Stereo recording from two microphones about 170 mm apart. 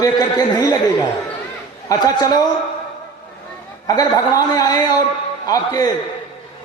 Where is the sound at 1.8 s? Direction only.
20° left (ahead or behind).